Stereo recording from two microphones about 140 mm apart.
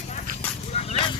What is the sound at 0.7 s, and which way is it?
Horse, 45° left (ahead or behind).